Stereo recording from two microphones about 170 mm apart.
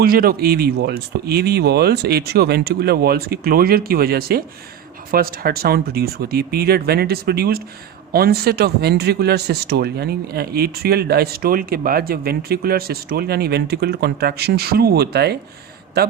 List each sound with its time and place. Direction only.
0.0 s speech: 60° right (ahead or behind)